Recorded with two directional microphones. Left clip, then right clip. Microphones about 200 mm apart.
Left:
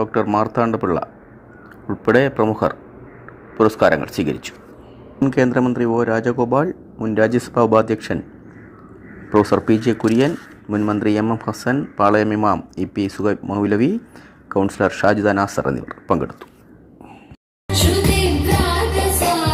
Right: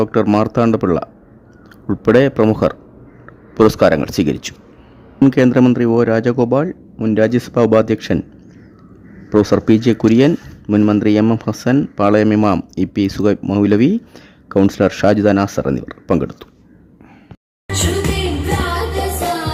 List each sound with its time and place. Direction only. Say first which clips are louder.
0.0 s speech: right 3 dB; 40° right (ahead or behind)
9.3 s speech: right 3 dB; 35° right (ahead or behind)
17.7 s music: left 1 dB; 50° left (ahead or behind)